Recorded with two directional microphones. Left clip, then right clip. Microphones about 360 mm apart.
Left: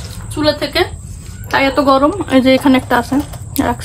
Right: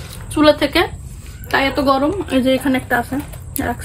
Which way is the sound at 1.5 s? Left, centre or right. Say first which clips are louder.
Left 4 dB; centre.